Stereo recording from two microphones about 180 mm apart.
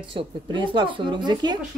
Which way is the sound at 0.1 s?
25° right (ahead or behind).